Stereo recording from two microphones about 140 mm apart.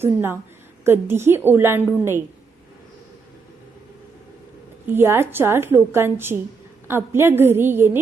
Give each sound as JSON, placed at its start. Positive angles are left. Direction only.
{"t": 0.0, "sound": "a woman's voice", "side_deg": -15}
{"t": 4.9, "sound": "a woman's voice", "side_deg": -15}